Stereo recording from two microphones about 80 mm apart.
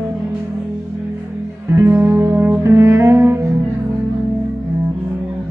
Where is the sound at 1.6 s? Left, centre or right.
Right.